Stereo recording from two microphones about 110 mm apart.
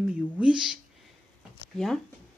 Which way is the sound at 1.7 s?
5° left (ahead or behind).